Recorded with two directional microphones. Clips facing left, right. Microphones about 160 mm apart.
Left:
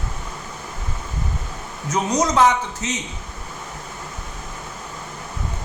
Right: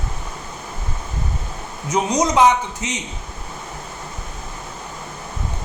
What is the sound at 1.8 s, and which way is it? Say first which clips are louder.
A man's voice: right 2 dB; 15° right (ahead or behind).